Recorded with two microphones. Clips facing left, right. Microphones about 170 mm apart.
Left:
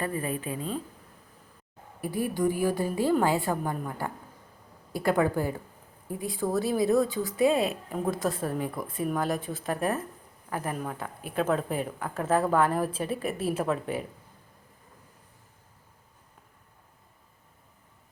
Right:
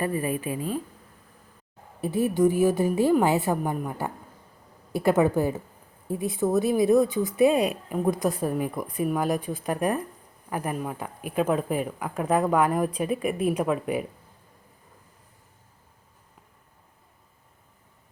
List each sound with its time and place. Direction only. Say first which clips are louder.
0.0 s speech: right 4 dB; 15° right (ahead or behind)
2.0 s a woman's voice: right 6 dB; 25° right (ahead or behind)